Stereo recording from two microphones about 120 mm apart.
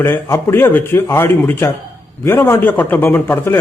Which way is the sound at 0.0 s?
20° left (ahead or behind).